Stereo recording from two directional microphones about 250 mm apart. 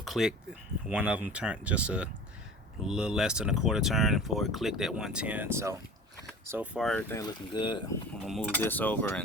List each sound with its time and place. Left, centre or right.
0.0 s speech: centre
7.2 s cutlery: centre
8.2 s cutlery: centre